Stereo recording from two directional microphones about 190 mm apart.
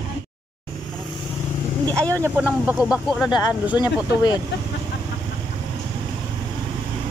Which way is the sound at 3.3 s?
20° left (ahead or behind).